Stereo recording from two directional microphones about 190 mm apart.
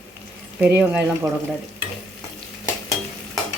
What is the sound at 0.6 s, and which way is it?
Speech, 10° right (ahead or behind).